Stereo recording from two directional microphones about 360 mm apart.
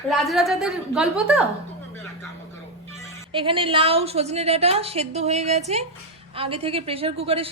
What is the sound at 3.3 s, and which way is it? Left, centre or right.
A woman's voice, centre.